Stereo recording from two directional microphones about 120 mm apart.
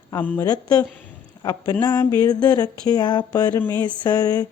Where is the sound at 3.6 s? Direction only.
20° left (ahead or behind).